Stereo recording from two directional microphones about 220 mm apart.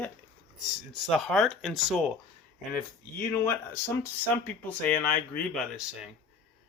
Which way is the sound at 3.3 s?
15° left (ahead or behind).